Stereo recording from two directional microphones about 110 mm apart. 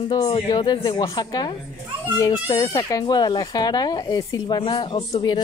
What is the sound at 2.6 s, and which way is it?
Speech, 40° left (ahead or behind).